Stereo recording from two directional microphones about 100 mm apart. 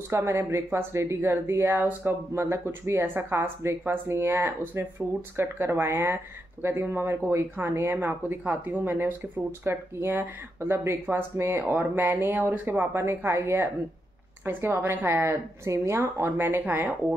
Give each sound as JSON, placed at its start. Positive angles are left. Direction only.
{"t": 0.1, "sound": "speech", "side_deg": -25}